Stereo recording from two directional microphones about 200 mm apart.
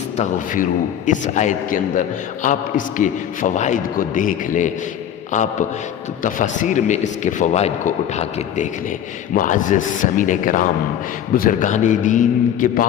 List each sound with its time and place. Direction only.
0.2 s a man's voice: 40° left (ahead or behind)